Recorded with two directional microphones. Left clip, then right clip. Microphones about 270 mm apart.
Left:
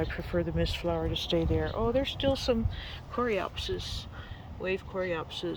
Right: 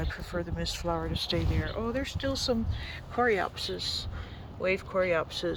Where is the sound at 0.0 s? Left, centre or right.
Centre.